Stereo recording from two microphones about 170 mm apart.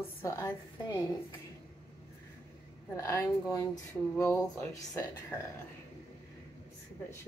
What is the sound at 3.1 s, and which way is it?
Speech, 15° left (ahead or behind).